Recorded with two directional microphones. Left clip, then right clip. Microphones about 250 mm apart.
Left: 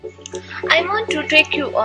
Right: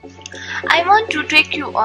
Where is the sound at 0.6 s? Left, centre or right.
Centre.